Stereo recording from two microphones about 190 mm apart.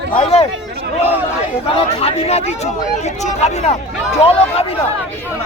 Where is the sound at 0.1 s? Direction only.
35° left (ahead or behind).